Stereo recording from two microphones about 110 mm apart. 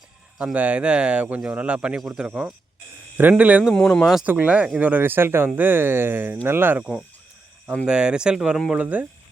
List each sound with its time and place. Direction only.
0.3 s speech: 10° right (ahead or behind)
3.6 s speech: centre (ahead or behind)
4.2 s speech: 15° right (ahead or behind)